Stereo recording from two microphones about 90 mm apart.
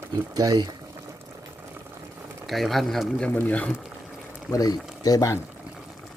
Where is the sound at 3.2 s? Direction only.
20° left (ahead or behind).